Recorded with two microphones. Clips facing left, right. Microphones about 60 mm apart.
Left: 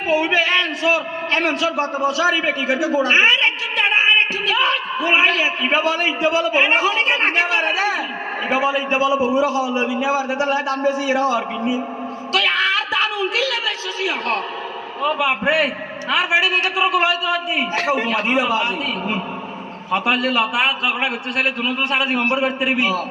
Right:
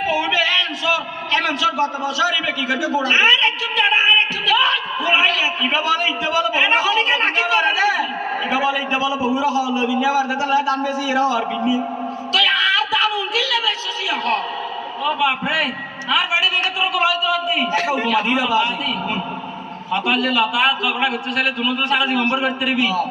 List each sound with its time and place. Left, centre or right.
0.1 s a man's voice: left
12.3 s a sound: left
15.0 s a man's voice: left